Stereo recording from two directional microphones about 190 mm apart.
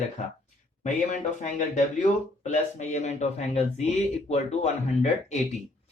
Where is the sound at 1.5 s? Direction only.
40° left (ahead or behind).